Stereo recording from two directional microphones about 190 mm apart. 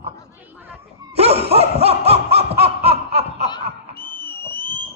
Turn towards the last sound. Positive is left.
turn(degrees=10)  # may be behind; listen again after turning